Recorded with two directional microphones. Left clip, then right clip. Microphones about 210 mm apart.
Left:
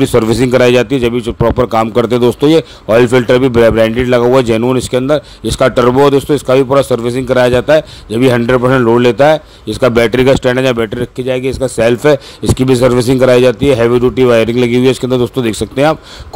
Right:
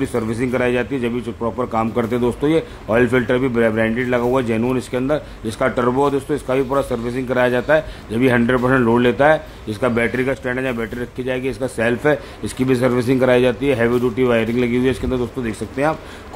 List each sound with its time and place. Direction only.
0.0 s a man's voice: 40° left (ahead or behind)